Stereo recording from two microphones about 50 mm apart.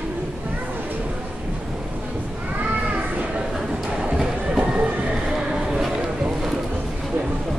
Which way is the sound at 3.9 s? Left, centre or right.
Centre.